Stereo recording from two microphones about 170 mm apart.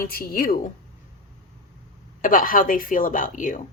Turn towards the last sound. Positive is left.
turn(degrees=50)  # may be behind; listen again after turning